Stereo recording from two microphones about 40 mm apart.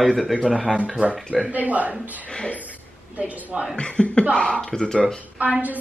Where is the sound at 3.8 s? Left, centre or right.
Left.